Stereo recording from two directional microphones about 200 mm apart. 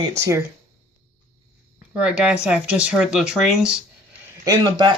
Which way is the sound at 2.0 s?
5° right (ahead or behind).